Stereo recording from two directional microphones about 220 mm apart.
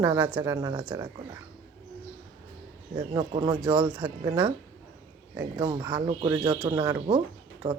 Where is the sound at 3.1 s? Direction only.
20° right (ahead or behind).